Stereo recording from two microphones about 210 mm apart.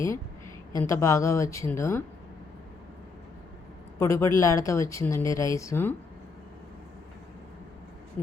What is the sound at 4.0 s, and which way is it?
A woman's voice, 15° left (ahead or behind).